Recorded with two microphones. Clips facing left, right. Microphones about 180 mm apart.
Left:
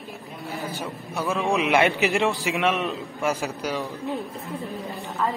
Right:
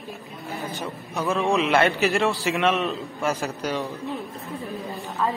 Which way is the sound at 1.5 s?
15° left (ahead or behind).